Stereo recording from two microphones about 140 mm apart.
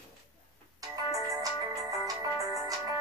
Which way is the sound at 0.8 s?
25° right (ahead or behind).